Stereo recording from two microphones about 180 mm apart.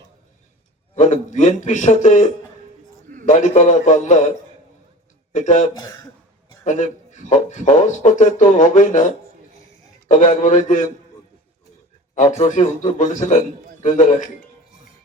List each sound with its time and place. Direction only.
0.9 s a man's voice: 40° left (ahead or behind)
5.7 s speech: 20° left (ahead or behind)
6.7 s a man's voice: 45° left (ahead or behind)
12.4 s a man's voice: 40° left (ahead or behind)